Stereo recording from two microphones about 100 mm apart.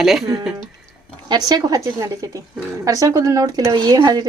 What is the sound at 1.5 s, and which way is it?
Speech, 40° right (ahead or behind).